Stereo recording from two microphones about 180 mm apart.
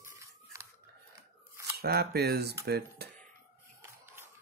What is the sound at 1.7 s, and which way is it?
Speech, 60° right (ahead or behind).